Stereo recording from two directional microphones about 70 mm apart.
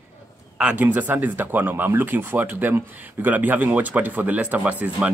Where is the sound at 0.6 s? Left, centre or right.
Centre.